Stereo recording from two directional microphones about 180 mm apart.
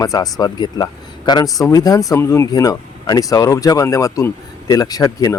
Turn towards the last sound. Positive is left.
turn(degrees=20)  # may be behind; listen again after turning